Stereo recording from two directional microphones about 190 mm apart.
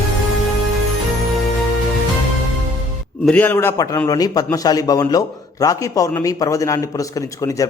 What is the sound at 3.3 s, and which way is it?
A man's voice, 10° left (ahead or behind).